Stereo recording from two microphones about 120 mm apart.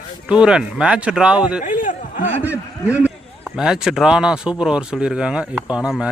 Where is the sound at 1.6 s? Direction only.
90° left.